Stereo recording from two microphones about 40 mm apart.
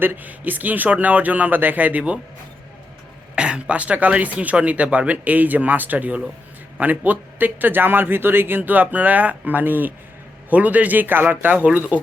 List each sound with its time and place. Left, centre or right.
0.2 s a man's voice: right
3.3 s a man's voice: right
10.5 s a man's voice: right
11.6 s speech: right